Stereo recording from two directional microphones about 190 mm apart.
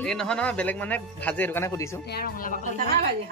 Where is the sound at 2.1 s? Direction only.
50° left (ahead or behind).